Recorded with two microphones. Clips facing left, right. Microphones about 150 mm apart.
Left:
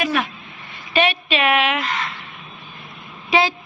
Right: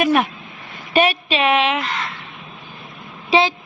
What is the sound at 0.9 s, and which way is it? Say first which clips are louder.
Speech: right 2 dB; 35° right (ahead or behind).